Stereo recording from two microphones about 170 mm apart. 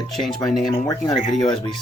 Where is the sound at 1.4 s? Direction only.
30° left (ahead or behind).